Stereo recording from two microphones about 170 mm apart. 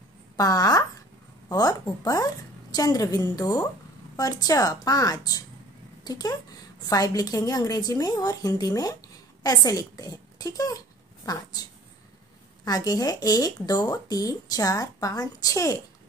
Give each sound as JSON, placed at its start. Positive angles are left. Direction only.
{"t": 0.4, "sound": "a woman's voice", "side_deg": 20}
{"t": 12.6, "sound": "speech", "side_deg": 25}